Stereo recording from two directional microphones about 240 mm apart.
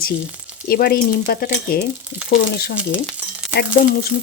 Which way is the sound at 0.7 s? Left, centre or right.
Left.